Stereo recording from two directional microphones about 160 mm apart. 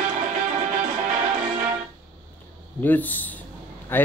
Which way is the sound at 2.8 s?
10° left (ahead or behind).